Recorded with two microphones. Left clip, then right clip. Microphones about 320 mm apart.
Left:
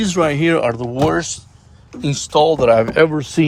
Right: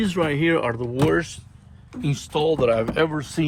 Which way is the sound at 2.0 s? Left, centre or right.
Centre.